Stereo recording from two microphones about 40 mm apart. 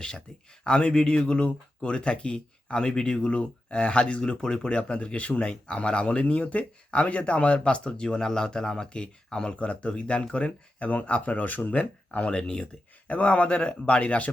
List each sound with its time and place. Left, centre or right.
0.6 s speech: left